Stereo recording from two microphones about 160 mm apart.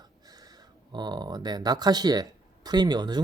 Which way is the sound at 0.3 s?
25° right (ahead or behind).